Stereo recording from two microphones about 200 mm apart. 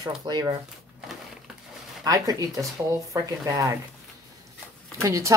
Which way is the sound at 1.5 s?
Centre (ahead or behind).